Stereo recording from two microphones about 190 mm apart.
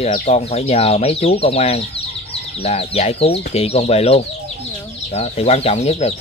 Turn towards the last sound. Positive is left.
turn(degrees=35)  # may be behind; listen again after turning